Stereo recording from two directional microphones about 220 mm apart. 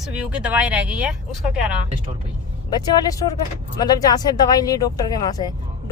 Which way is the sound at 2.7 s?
15° left (ahead or behind).